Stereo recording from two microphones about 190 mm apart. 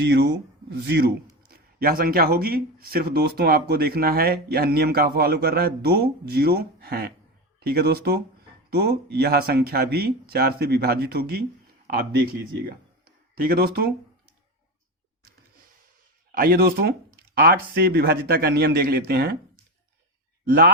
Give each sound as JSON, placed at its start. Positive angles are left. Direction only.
{"t": 0.0, "sound": "speech", "side_deg": -60}
{"t": 13.3, "sound": "a man's voice", "side_deg": -50}
{"t": 16.3, "sound": "a man's voice", "side_deg": -50}
{"t": 20.4, "sound": "speech", "side_deg": -50}